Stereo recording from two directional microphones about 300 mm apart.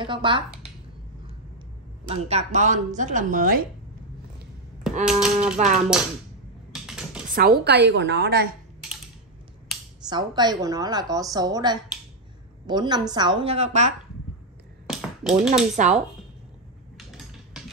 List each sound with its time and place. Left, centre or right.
0.0 s speech: centre
2.0 s speech: right
5.0 s speech: centre
6.7 s typing: centre
7.2 s a woman's voice: right
10.0 s a woman's voice: centre
14.9 s tap: centre
15.5 s speech: right
16.9 s a sound: centre